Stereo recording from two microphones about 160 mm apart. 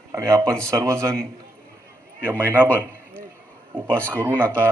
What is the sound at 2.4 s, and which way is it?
Speech, 10° right (ahead or behind).